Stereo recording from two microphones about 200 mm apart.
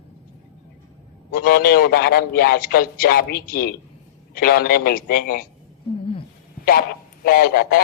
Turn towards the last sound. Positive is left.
turn(degrees=50)  # may be behind; listen again after turning